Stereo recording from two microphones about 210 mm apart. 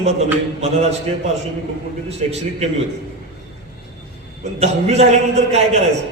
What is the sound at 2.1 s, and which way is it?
Speech, 30° right (ahead or behind).